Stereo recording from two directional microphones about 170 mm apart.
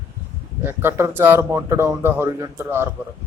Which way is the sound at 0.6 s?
15° right (ahead or behind).